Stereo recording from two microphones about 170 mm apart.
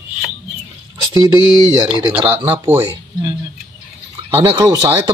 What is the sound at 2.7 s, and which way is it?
Speech, 10° right (ahead or behind).